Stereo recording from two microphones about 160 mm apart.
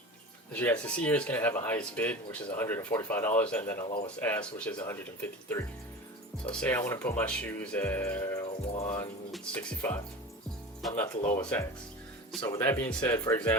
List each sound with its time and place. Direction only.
0.5 s speech: 10° left (ahead or behind)
8.4 s speech: 35° left (ahead or behind)
9.3 s speech: 10° left (ahead or behind)
10.8 s speech: centre (ahead or behind); by 13.6 s 15° left (ahead or behind)